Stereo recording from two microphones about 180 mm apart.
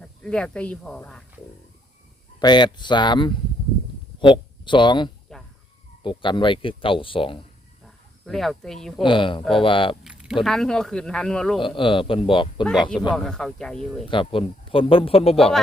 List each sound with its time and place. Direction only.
0.0 s speech: 5° left (ahead or behind)
2.4 s speech: 25° left (ahead or behind)
7.9 s speech: centre (ahead or behind)
9.0 s speech: 30° left (ahead or behind)
10.0 s a sound: 5° right (ahead or behind)
10.4 s speech: 5° left (ahead or behind)
11.6 s speech: 30° left (ahead or behind)
13.1 s speech: 5° left (ahead or behind)
14.1 s speech: 30° left (ahead or behind)
15.4 s speech: centre (ahead or behind)